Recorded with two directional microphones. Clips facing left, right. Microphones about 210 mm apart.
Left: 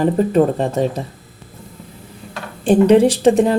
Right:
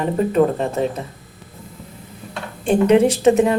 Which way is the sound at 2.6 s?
35° left (ahead or behind).